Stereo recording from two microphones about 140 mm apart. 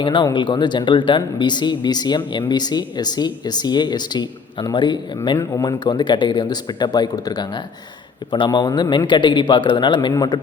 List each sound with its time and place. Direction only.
0.0 s speech: 35° left (ahead or behind)